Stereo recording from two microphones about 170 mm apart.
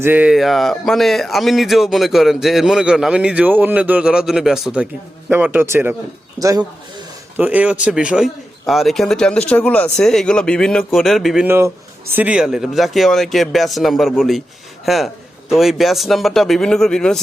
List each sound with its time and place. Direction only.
0.0 s speech: 10° right (ahead or behind)
7.3 s speech: 10° right (ahead or behind)
11.4 s speech: 15° right (ahead or behind); by 17.2 s 5° left (ahead or behind)